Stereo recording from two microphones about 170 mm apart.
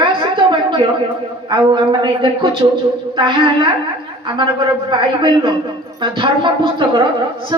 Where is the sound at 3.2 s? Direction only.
30° right (ahead or behind).